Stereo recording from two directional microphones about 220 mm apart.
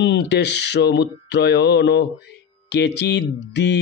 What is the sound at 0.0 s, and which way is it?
Mantra, 50° left (ahead or behind).